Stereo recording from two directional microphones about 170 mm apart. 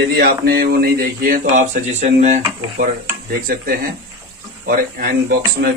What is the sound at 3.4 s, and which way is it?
Speech, 60° right (ahead or behind).